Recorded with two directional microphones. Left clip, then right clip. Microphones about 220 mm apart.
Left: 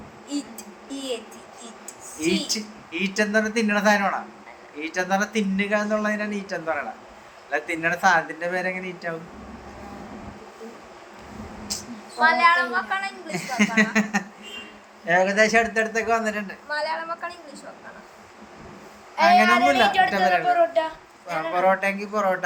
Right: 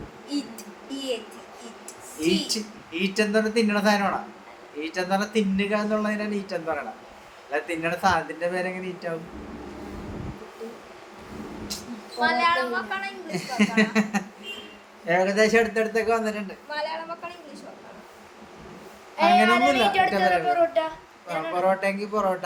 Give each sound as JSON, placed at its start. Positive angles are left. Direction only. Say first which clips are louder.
{"t": 2.1, "sound": "a man's voice", "louder": "even", "side_deg": 0}
{"t": 11.7, "sound": "a sound", "louder": "left 5 dB", "side_deg": -15}
{"t": 12.2, "sound": "a man's voice", "louder": "left 4 dB", "side_deg": 0}
{"t": 19.1, "sound": "a man's voice", "louder": "left 2 dB", "side_deg": -15}
{"t": 21.5, "sound": "a man's voice", "louder": "left 3 dB", "side_deg": -5}